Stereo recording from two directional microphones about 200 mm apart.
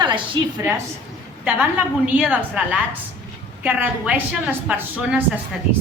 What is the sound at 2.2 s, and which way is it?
A woman's voice, 10° right (ahead or behind).